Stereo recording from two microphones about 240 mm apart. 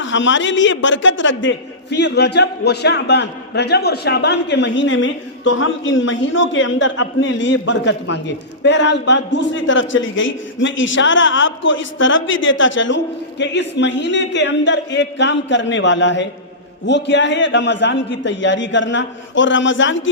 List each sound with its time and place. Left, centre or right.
0.0 s a man's voice: left